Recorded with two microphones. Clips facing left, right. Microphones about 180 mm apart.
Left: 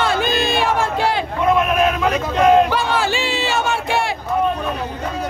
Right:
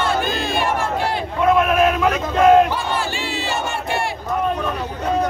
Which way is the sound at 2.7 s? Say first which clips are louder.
Left 4 dB; 90° left.